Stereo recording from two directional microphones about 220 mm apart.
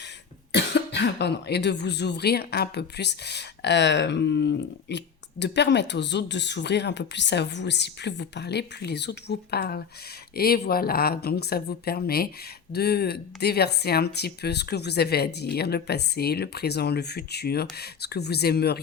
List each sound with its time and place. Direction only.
0.5 s speech: 50° left (ahead or behind)